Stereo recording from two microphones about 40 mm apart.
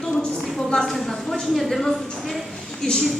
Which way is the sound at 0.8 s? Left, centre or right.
Centre.